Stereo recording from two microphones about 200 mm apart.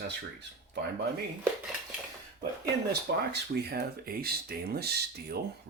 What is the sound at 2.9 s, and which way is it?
Speech, 55° right (ahead or behind).